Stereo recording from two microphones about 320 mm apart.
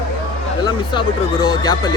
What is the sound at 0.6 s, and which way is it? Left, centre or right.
Speech, centre.